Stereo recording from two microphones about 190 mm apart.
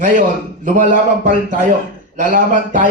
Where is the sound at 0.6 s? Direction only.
45° right (ahead or behind).